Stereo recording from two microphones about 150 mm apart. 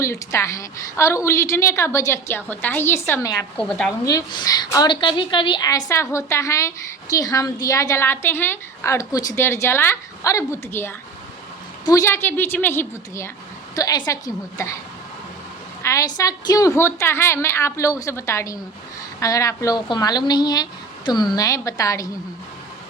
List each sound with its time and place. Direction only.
0.0 s a woman's voice: 20° left (ahead or behind)
3.6 s a woman's voice: 5° left (ahead or behind)
4.0 s a woman's voice: 25° left (ahead or behind)
15.8 s a woman's voice: 20° left (ahead or behind)